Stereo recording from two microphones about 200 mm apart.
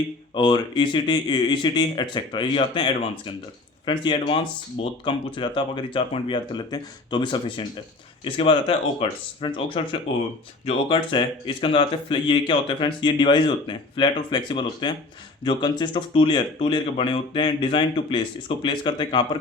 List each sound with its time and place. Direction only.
0.3 s speech: 25° left (ahead or behind)